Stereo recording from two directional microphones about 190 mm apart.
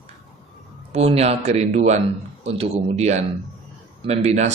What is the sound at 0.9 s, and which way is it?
A man's voice, 35° right (ahead or behind).